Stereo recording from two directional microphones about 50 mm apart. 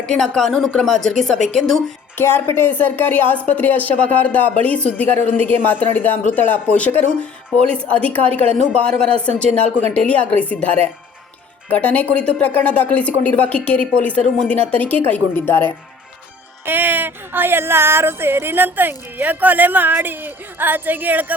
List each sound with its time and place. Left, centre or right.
0.1 s speech: centre
2.1 s a woman's voice: left
12.1 s speech: centre
12.4 s a woman's voice: left
15.4 s speech: left
16.6 s speech: right